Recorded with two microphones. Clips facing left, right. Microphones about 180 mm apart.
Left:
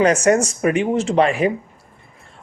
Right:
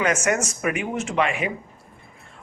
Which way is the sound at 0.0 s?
35° left (ahead or behind).